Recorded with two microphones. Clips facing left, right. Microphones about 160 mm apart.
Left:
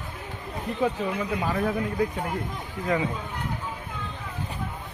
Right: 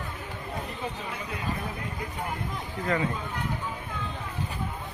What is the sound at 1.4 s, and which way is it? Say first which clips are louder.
Speech: left 7 dB; 90° left.